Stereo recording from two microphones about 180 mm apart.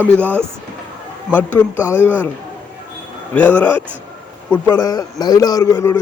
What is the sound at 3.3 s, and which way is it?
A man's voice, 10° left (ahead or behind).